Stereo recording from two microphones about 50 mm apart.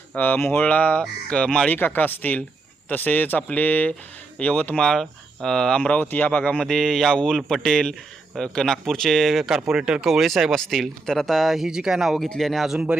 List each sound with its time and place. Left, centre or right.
0.2 s speech: left
0.6 s speech: left
1.7 s speech: left
4.8 s speech: centre
5.9 s speech: left
6.6 s speech: centre
9.6 s speech: centre